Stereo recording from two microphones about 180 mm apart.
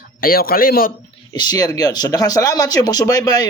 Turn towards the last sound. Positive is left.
turn(degrees=20)  # may be behind; listen again after turning